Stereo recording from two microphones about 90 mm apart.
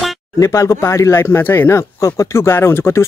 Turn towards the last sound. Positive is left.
turn(degrees=25)  # may be behind; listen again after turning